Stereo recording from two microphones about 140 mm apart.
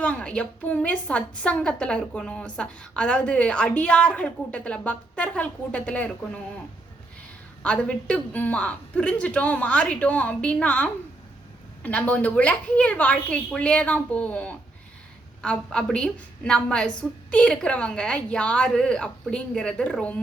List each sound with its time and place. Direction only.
0.0 s a woman's voice: 10° left (ahead or behind)
7.6 s a woman's voice: 10° left (ahead or behind)